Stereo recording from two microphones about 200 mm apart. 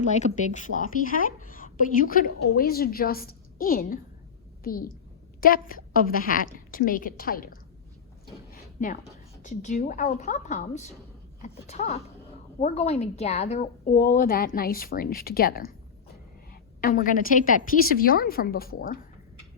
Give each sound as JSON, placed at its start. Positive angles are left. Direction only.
{"t": 0.2, "sound": "a woman's voice", "side_deg": 40}
{"t": 8.8, "sound": "a woman's voice", "side_deg": 35}